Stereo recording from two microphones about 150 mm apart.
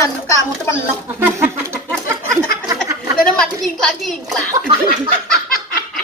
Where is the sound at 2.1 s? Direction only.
20° right (ahead or behind).